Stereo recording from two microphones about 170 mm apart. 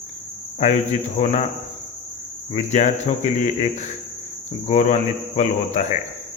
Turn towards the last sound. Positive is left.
turn(degrees=45)  # may be behind; listen again after turning